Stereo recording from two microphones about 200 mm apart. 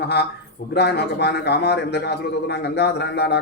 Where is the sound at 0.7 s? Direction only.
55° left (ahead or behind).